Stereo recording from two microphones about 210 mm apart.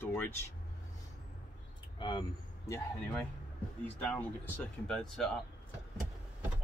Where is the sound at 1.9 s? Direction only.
20° left (ahead or behind).